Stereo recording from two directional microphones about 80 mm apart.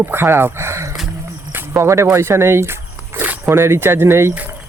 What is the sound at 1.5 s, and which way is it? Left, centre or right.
Zipper, right.